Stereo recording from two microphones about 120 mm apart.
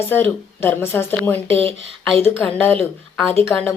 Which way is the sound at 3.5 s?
15° left (ahead or behind).